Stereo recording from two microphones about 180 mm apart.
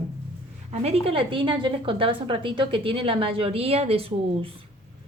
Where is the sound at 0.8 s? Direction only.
35° right (ahead or behind).